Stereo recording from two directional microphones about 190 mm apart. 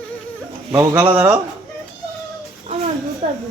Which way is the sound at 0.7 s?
10° right (ahead or behind).